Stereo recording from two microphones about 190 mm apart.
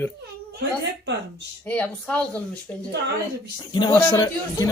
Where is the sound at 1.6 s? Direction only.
5° left (ahead or behind).